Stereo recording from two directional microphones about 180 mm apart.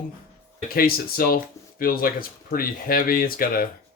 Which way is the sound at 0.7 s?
55° left (ahead or behind).